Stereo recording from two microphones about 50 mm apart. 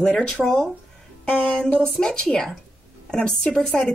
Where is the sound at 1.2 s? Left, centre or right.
Centre.